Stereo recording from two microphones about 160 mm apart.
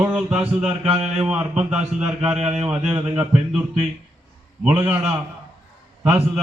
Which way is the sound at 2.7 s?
5° right (ahead or behind).